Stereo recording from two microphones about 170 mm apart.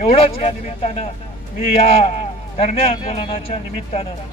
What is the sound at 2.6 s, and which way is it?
Speech, 40° left (ahead or behind).